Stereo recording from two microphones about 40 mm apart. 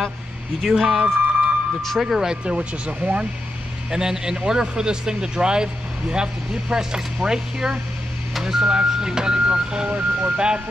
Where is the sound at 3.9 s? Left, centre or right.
Centre.